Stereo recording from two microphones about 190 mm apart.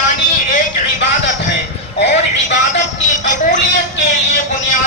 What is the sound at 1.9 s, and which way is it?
Speech, 65° left (ahead or behind).